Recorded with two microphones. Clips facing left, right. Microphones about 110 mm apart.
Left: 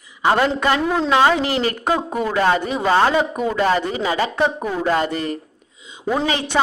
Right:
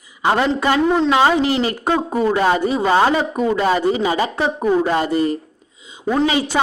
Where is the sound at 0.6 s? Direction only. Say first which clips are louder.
Right 3 dB; 15° right (ahead or behind).